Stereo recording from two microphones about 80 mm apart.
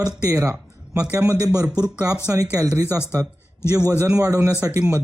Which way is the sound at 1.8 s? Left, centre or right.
Right.